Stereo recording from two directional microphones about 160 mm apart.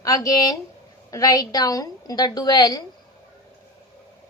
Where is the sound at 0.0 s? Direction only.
20° left (ahead or behind).